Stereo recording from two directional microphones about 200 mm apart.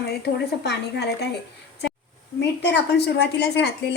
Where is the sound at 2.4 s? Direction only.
55° left (ahead or behind).